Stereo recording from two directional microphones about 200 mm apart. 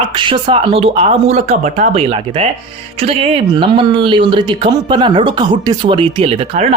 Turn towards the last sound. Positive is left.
turn(degrees=-30)  # may be behind; listen again after turning